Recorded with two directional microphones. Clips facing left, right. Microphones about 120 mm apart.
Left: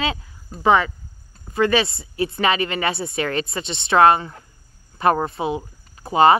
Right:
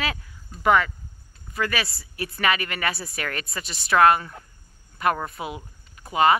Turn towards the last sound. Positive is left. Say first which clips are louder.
# left 5 dB
turn(degrees=30)  # may be behind; listen again after turning